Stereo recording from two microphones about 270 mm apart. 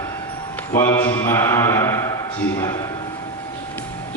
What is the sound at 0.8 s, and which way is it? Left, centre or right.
Mantra, centre.